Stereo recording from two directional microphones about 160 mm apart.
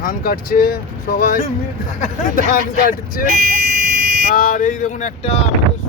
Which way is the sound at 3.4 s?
75° right (ahead or behind).